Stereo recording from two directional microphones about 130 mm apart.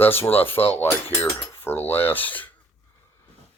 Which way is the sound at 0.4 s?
45° left (ahead or behind).